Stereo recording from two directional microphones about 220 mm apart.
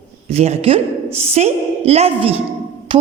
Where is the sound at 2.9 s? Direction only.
25° right (ahead or behind).